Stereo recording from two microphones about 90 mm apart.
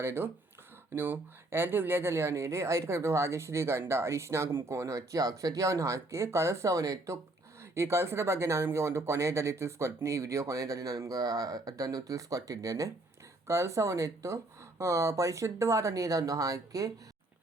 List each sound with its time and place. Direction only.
0.0 s speech: 25° right (ahead or behind)